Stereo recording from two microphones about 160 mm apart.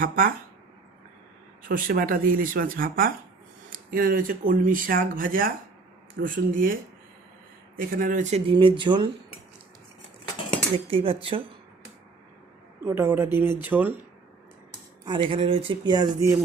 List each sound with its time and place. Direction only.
0.0 s speech: 60° right (ahead or behind)
1.6 s speech: 60° right (ahead or behind)
7.8 s speech: 60° right (ahead or behind)
8.4 s speech: 30° right (ahead or behind)
10.8 s speech: 35° right (ahead or behind)
12.8 s speech: 15° right (ahead or behind)
15.0 s speech: 30° right (ahead or behind)